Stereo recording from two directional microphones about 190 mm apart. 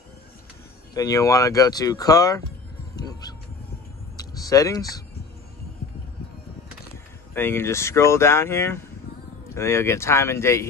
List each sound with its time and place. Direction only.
0.9 s speech: 20° left (ahead or behind)
3.0 s music: 20° left (ahead or behind)
4.2 s a sound: 20° left (ahead or behind)
7.3 s speech: 10° left (ahead or behind)